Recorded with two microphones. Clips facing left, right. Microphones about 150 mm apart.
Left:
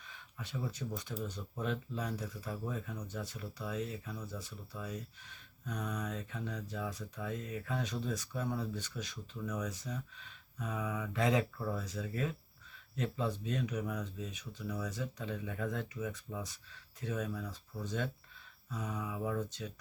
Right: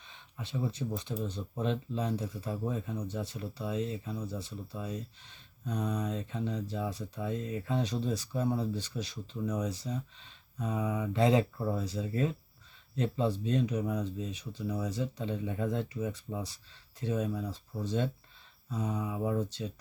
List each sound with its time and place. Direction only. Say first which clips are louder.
0.0 s speech: right 3 dB; 25° right (ahead or behind)